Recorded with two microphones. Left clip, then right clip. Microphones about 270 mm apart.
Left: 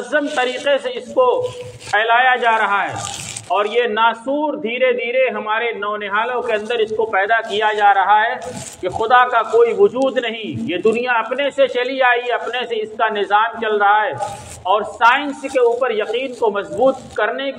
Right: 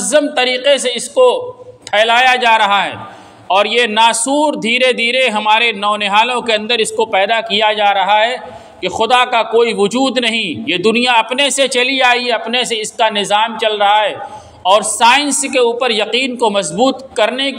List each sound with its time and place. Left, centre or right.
0.1 s a man's voice: right